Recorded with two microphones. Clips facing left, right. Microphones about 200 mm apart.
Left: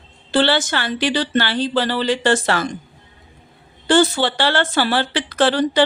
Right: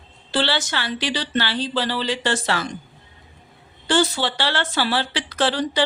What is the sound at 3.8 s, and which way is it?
A woman's voice, 55° left (ahead or behind).